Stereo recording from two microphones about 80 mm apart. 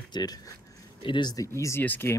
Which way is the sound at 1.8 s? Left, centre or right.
Left.